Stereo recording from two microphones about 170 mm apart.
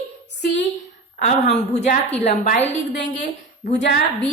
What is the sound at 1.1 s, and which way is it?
A woman's voice, 45° left (ahead or behind).